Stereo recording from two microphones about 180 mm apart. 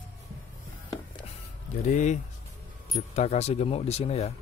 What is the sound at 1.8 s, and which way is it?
Speech, 40° left (ahead or behind).